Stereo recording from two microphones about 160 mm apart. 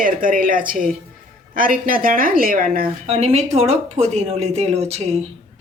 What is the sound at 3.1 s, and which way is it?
Speech, 40° right (ahead or behind).